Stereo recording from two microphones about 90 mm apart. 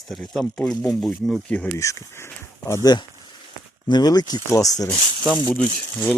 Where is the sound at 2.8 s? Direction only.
50° left (ahead or behind).